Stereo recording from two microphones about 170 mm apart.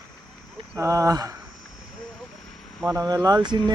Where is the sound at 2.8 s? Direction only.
20° right (ahead or behind).